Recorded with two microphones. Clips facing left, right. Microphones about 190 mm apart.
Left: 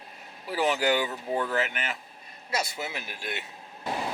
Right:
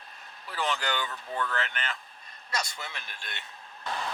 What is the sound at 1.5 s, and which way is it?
Speech, 10° left (ahead or behind).